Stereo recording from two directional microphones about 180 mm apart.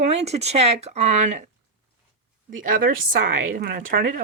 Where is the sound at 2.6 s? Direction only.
50° right (ahead or behind).